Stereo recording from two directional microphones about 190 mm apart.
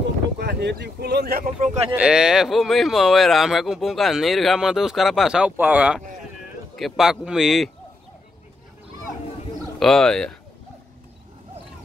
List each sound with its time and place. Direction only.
0.4 s speech: 60° right (ahead or behind); by 1.9 s 40° right (ahead or behind)
2.0 s speech: 5° right (ahead or behind)
9.8 s speech: centre (ahead or behind)